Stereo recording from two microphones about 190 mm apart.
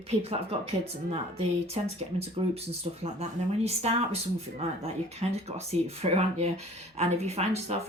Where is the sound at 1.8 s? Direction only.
40° right (ahead or behind).